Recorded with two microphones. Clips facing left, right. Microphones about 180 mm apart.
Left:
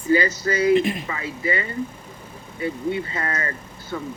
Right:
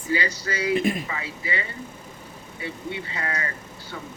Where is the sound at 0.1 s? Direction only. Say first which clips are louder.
Left 7 dB; 45° left (ahead or behind).